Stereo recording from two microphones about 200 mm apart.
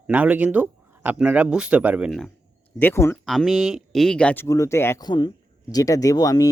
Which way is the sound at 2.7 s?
10° left (ahead or behind).